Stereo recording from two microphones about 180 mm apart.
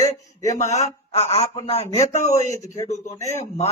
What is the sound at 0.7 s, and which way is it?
A man's voice, 35° left (ahead or behind).